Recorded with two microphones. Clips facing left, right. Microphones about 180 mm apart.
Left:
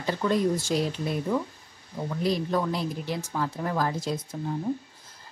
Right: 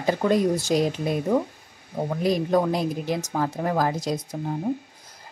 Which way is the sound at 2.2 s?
15° right (ahead or behind).